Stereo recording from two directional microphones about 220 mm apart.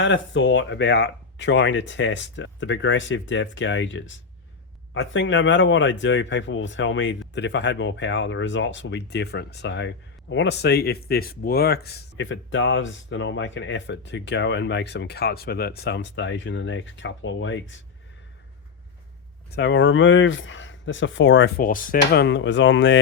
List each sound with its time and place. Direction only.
0.0 s speech: 55° left (ahead or behind)
19.5 s speech: 50° left (ahead or behind)